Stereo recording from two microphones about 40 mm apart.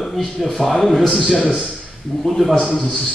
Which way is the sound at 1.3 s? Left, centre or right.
Centre.